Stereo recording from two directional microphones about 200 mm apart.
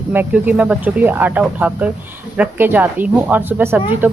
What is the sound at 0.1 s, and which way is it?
A woman's voice, 10° right (ahead or behind).